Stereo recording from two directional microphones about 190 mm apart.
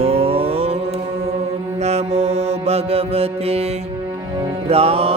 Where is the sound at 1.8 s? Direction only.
35° right (ahead or behind).